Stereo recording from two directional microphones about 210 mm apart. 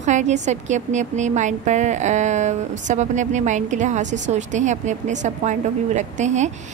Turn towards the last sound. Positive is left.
turn(degrees=-35)  # may be behind; listen again after turning